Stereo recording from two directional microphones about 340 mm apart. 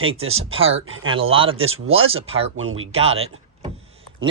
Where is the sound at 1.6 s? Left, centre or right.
Right.